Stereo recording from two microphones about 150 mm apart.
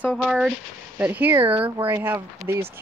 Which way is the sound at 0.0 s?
5° left (ahead or behind).